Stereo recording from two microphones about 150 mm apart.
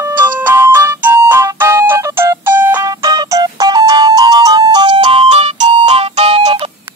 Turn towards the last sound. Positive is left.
turn(degrees=-45)  # may be behind; listen again after turning